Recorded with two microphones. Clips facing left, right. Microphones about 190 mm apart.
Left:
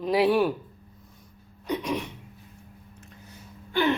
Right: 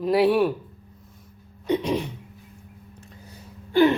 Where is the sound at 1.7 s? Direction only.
30° right (ahead or behind).